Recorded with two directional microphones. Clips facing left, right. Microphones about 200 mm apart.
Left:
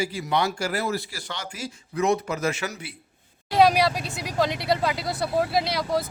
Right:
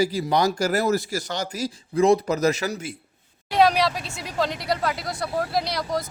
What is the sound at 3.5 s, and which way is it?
Speech, 10° left (ahead or behind).